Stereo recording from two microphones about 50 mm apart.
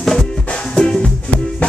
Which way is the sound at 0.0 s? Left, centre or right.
Centre.